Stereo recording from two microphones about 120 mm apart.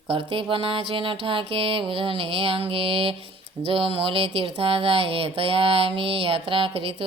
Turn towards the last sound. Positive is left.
turn(degrees=-50)  # may be behind; listen again after turning